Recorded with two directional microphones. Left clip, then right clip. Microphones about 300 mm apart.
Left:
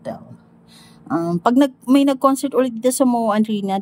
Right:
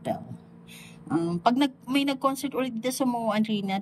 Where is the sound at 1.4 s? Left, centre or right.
Centre.